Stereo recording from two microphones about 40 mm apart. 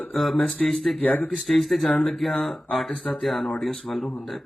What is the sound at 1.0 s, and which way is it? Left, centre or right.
Speech, left.